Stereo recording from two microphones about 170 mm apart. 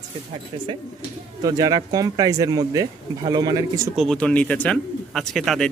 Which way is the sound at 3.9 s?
Centre (ahead or behind).